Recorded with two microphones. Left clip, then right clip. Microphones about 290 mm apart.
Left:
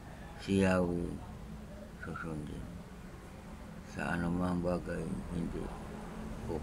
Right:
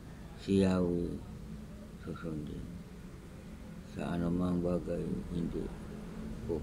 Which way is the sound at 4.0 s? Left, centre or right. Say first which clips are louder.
Left 1 dB; centre.